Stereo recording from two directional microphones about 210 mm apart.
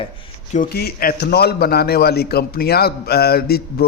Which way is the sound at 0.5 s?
45° left (ahead or behind).